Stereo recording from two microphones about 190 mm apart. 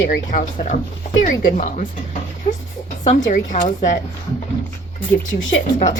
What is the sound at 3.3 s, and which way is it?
Speech, 45° left (ahead or behind).